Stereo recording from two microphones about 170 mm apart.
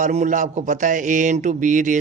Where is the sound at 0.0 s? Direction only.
45° right (ahead or behind).